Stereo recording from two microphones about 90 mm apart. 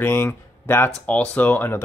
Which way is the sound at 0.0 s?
25° left (ahead or behind).